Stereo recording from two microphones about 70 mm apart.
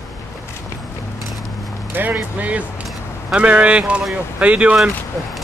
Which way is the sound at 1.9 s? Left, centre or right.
Right.